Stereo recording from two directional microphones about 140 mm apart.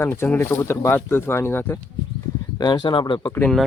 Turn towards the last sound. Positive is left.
turn(degrees=10)  # may be behind; listen again after turning